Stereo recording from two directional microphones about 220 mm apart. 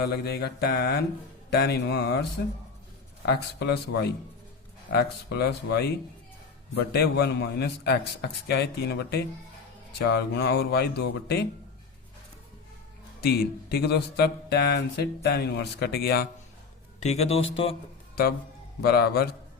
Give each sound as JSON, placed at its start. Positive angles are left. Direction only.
{"t": 0.0, "sound": "speech", "side_deg": 45}
{"t": 3.2, "sound": "speech", "side_deg": 50}
{"t": 13.2, "sound": "speech", "side_deg": 45}
{"t": 17.0, "sound": "speech", "side_deg": 30}
{"t": 18.8, "sound": "speech", "side_deg": 45}